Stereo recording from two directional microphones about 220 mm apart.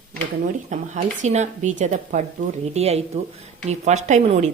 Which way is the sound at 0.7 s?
35° right (ahead or behind).